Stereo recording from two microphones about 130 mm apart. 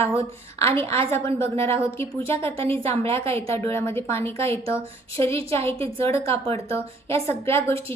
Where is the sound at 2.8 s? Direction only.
50° right (ahead or behind).